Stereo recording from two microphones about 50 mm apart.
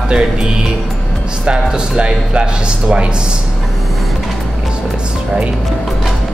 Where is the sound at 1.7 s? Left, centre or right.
Centre.